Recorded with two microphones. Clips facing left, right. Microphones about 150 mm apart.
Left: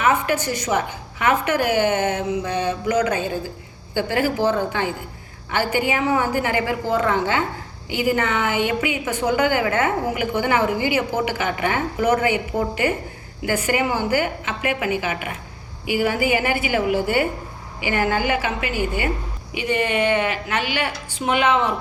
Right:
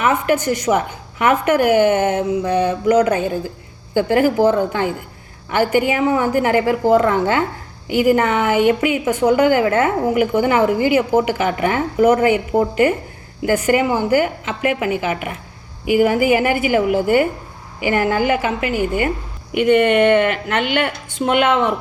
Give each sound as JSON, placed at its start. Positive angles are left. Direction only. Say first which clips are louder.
{"t": 0.1, "sound": "a woman's voice", "louder": "right 4 dB", "side_deg": -50}